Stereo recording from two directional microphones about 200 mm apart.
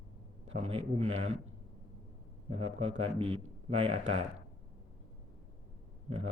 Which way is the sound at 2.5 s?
30° right (ahead or behind).